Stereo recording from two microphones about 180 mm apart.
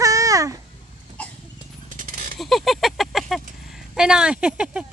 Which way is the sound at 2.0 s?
45° right (ahead or behind).